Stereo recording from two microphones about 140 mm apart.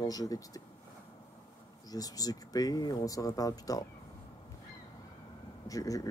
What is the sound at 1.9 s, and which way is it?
Speech, 25° left (ahead or behind).